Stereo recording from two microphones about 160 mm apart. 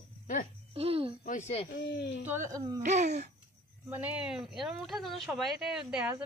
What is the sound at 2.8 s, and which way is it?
Speech, 45° right (ahead or behind).